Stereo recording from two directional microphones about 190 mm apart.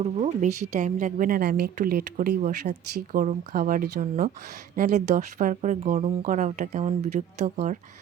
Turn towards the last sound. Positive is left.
turn(degrees=-40)  # may be behind; listen again after turning